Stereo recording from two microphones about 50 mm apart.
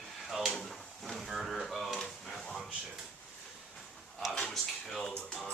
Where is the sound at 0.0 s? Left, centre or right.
Centre.